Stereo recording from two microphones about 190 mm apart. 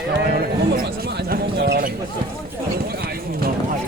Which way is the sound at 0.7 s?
55° right (ahead or behind).